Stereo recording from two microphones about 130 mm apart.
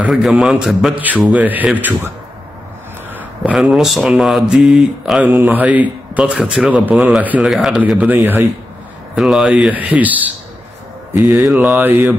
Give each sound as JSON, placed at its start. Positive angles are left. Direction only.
{"t": 0.1, "sound": "speech", "side_deg": 0}
{"t": 0.9, "sound": "a man's voice", "side_deg": -15}
{"t": 3.5, "sound": "speech", "side_deg": 0}
{"t": 5.3, "sound": "a man's voice", "side_deg": -15}
{"t": 9.1, "sound": "a man's voice", "side_deg": -5}
{"t": 11.1, "sound": "mantra", "side_deg": -25}
{"t": 11.5, "sound": "a man's voice", "side_deg": -10}